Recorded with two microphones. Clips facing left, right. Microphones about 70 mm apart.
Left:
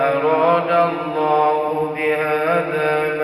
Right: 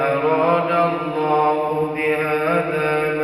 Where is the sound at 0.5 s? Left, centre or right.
Left.